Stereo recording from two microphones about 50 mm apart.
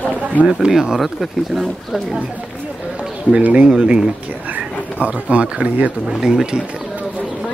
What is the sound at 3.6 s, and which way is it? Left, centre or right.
Speech, centre.